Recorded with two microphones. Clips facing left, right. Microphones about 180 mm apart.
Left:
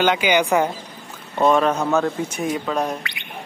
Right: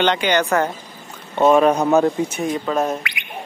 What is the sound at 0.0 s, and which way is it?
Speech, 5° left (ahead or behind).